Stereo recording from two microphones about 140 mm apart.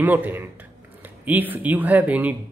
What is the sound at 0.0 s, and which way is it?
Speech, 15° right (ahead or behind).